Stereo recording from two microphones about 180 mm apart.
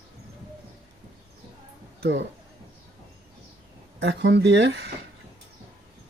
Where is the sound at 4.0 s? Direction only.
75° right (ahead or behind).